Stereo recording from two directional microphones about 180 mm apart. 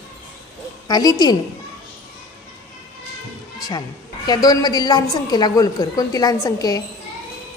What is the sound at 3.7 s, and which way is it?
A woman's voice, 20° left (ahead or behind).